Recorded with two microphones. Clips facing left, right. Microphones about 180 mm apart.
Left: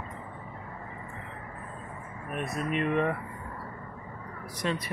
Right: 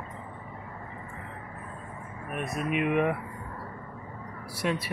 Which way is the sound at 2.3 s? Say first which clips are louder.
Right 1 dB; 5° right (ahead or behind).